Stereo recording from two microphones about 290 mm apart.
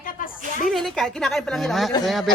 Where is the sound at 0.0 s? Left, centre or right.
Left.